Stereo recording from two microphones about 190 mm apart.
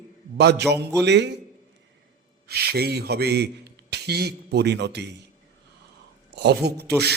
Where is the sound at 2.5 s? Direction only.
55° right (ahead or behind).